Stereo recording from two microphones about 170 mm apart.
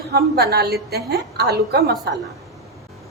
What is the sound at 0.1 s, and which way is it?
A woman's voice, 65° right (ahead or behind).